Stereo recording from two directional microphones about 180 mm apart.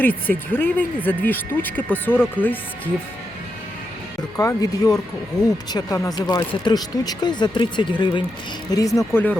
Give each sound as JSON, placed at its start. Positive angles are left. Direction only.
{"t": 0.0, "sound": "speech", "side_deg": 10}
{"t": 4.4, "sound": "speech", "side_deg": 20}